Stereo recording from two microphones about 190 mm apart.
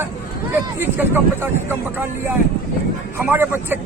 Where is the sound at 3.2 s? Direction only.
10° right (ahead or behind).